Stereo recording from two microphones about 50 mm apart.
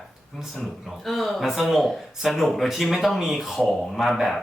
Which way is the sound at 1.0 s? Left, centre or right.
Centre.